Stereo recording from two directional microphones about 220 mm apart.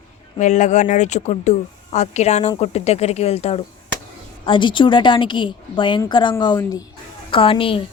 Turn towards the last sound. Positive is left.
turn(degrees=25)  # may be behind; listen again after turning